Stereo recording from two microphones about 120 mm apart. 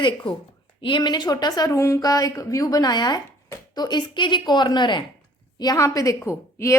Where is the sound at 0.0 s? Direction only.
40° left (ahead or behind).